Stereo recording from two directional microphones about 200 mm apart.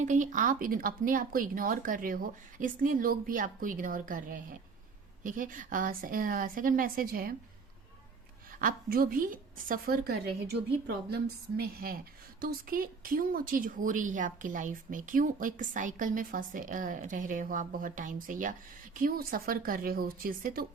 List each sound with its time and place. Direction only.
0.0 s speech: 40° right (ahead or behind)
8.5 s speech: 45° right (ahead or behind)